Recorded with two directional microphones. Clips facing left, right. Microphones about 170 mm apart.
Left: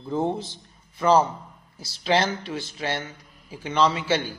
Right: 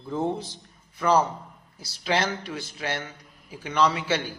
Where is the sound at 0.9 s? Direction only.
30° left (ahead or behind).